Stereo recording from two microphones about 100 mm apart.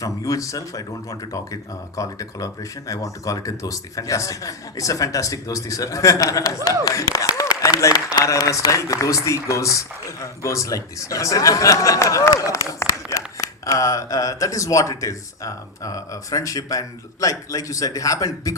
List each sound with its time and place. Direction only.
0.0 s a man's voice: 35° left (ahead or behind)
2.0 s a man's voice: 35° left (ahead or behind)
6.8 s a sound: 35° left (ahead or behind)
8.2 s a man's voice: 30° left (ahead or behind)